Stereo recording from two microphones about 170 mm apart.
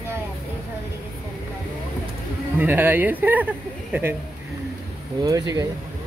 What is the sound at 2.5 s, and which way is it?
Speech, 10° right (ahead or behind).